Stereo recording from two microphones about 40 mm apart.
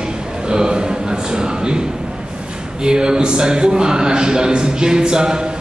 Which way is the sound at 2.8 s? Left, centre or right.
Centre.